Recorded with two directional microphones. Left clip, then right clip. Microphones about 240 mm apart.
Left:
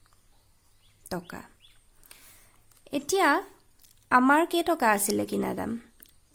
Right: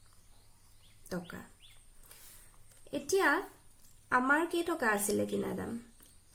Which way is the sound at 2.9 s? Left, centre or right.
Left.